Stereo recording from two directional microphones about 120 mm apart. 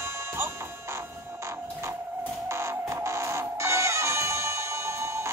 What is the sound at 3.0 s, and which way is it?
Music, 25° right (ahead or behind).